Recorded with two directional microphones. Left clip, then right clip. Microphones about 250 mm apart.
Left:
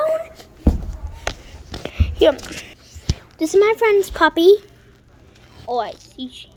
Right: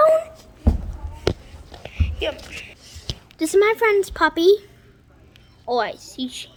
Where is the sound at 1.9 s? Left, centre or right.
Left.